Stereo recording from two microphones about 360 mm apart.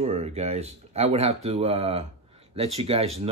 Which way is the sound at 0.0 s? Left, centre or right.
Centre.